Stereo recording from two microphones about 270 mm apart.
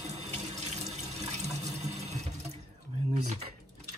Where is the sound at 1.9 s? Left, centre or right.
Right.